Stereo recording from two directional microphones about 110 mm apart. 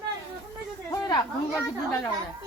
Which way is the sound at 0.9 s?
35° left (ahead or behind).